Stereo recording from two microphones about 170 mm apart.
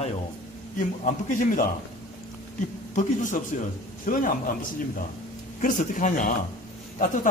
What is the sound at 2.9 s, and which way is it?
A man's voice, 50° left (ahead or behind).